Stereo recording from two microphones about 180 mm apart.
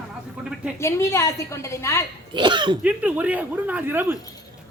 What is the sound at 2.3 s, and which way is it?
Speech, 25° right (ahead or behind).